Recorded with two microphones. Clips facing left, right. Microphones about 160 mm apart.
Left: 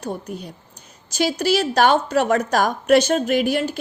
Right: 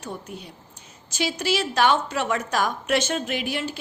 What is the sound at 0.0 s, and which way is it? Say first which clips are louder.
A woman's voice: left 6 dB; 40° left (ahead or behind).